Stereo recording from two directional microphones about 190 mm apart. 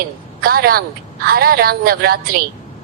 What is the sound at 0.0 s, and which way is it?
A woman's voice, 50° right (ahead or behind).